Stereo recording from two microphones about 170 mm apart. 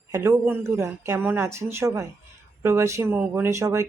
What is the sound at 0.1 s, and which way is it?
Speech, 15° right (ahead or behind).